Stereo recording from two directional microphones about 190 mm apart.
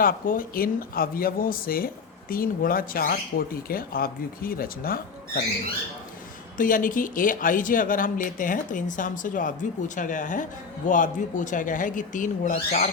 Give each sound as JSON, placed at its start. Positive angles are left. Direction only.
{"t": 0.0, "sound": "speech", "side_deg": 50}
{"t": 6.6, "sound": "speech", "side_deg": 45}